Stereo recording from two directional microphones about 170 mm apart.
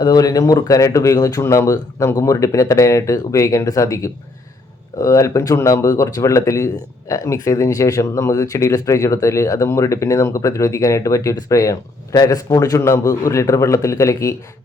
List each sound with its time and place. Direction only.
0.0 s speech: 20° left (ahead or behind)